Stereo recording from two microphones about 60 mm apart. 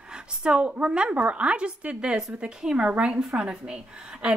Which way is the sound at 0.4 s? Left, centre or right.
Centre.